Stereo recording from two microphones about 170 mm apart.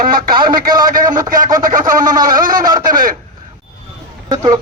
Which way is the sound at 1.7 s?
50° right (ahead or behind).